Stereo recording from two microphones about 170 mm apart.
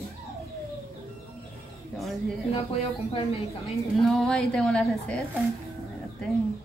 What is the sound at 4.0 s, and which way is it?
A woman's voice, 5° left (ahead or behind).